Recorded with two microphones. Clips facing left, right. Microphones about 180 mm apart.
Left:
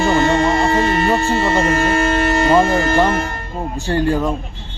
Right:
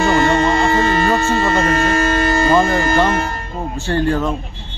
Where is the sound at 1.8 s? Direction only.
40° right (ahead or behind).